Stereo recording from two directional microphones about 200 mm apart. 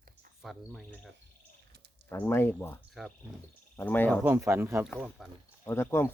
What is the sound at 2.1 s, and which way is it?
Speech, 10° left (ahead or behind).